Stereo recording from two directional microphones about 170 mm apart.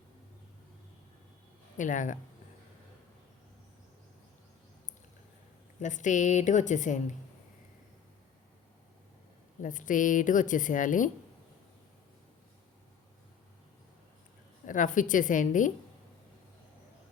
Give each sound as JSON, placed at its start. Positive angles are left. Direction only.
{"t": 1.7, "sound": "speech", "side_deg": 50}
{"t": 5.8, "sound": "a woman's voice", "side_deg": 45}
{"t": 9.6, "sound": "a woman's voice", "side_deg": 50}
{"t": 14.7, "sound": "a woman's voice", "side_deg": 50}